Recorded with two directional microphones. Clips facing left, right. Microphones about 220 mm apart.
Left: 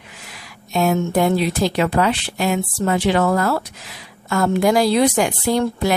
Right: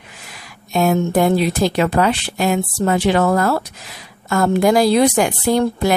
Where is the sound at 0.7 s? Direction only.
45° right (ahead or behind).